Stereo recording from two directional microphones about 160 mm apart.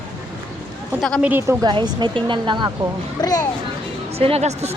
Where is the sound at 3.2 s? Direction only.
25° left (ahead or behind).